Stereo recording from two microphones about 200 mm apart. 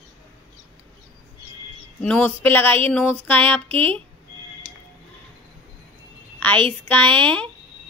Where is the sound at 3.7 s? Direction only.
30° right (ahead or behind).